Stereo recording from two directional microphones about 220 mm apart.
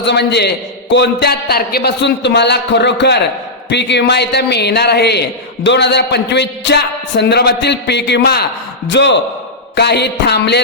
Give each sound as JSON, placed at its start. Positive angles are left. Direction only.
{"t": 0.0, "sound": "a man's voice", "side_deg": 50}